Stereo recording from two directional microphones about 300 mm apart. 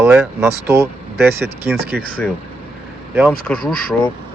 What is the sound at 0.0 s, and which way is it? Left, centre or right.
Speech, centre.